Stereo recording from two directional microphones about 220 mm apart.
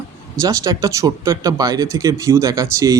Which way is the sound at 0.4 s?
15° right (ahead or behind).